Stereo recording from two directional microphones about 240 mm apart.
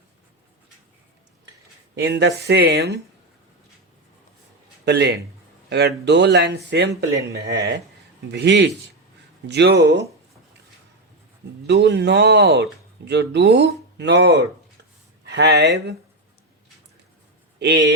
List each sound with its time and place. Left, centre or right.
2.0 s speech: right
4.9 s speech: right
11.6 s speech: right